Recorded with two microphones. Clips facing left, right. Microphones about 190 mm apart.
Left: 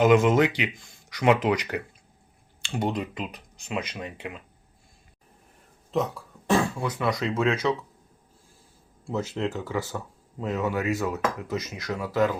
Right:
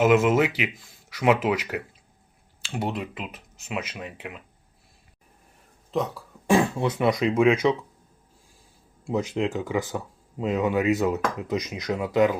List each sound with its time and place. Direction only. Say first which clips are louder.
0.0 s speech: even; 5° right (ahead or behind)
5.9 s speech: even; centre (ahead or behind)
6.5 s speech: right 3 dB; 20° right (ahead or behind)
9.0 s speech: right 3 dB; 15° right (ahead or behind)